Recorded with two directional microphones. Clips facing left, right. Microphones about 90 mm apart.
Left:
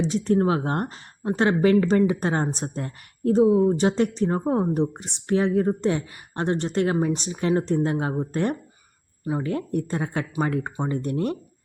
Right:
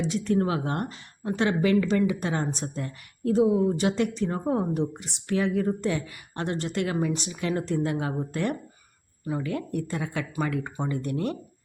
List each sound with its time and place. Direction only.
0.0 s speech: 35° left (ahead or behind)